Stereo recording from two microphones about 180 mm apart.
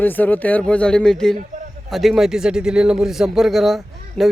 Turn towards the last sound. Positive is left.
turn(degrees=0)  # may be behind; listen again after turning